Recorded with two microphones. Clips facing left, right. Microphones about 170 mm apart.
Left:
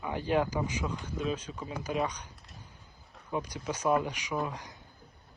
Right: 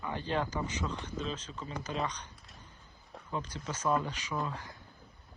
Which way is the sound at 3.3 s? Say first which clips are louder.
Left 4 dB; 15° left (ahead or behind).